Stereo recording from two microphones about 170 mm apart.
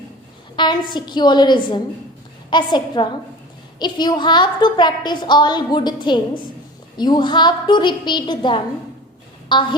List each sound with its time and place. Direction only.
0.5 s a woman's voice: 25° left (ahead or behind)